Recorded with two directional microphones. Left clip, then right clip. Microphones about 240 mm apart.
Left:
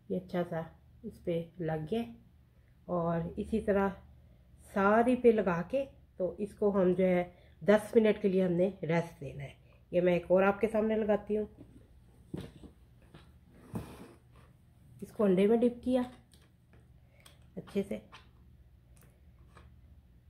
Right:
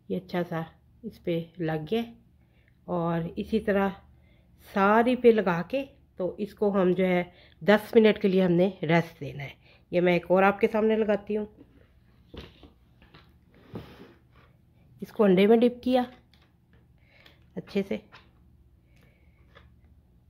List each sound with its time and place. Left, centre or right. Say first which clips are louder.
0.1 s a woman's voice: right 4 dB; right
15.0 s a woman's voice: right 7 dB; right
17.6 s a woman's voice: right 6 dB; right